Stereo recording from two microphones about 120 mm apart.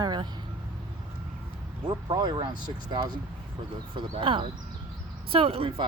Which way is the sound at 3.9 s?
45° right (ahead or behind).